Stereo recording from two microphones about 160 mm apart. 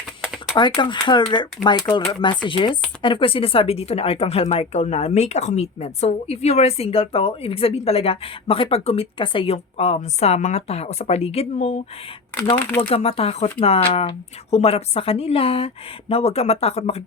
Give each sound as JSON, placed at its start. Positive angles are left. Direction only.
{"t": 0.5, "sound": "speech", "side_deg": 30}
{"t": 12.9, "sound": "speech", "side_deg": 40}